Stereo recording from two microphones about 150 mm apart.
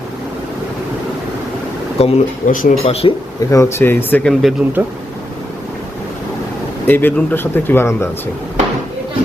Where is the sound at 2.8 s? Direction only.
40° left (ahead or behind).